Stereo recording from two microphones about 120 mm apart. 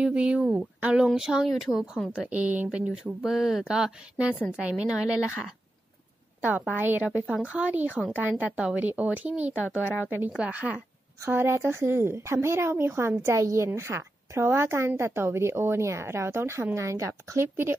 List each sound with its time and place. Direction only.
0.0 s speech: 10° right (ahead or behind)
6.4 s a woman's voice: 15° right (ahead or behind)